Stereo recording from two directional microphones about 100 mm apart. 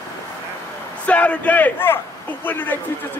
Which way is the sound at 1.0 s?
15° left (ahead or behind).